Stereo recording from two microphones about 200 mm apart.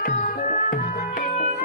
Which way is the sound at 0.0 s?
40° left (ahead or behind).